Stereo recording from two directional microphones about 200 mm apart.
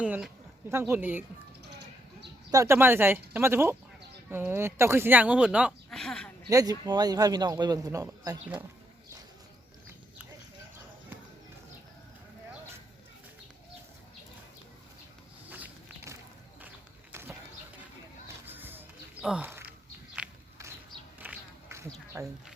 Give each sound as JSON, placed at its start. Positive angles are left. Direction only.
{"t": 0.0, "sound": "speech", "side_deg": -5}
{"t": 2.5, "sound": "speech", "side_deg": -15}
{"t": 6.5, "sound": "a man's voice", "side_deg": -20}
{"t": 15.4, "sound": "a sound", "side_deg": -10}
{"t": 17.1, "sound": "horse", "side_deg": -10}
{"t": 18.4, "sound": "music", "side_deg": -10}
{"t": 20.1, "sound": "a sound", "side_deg": -15}